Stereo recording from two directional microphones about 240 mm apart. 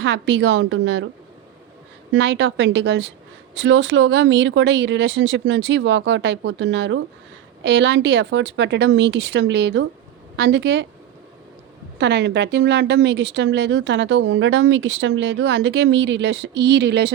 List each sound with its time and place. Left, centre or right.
0.0 s speech: right
2.1 s speech: right
11.9 s speech: right